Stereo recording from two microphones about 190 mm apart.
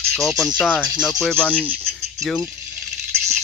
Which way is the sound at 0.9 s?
Centre (ahead or behind).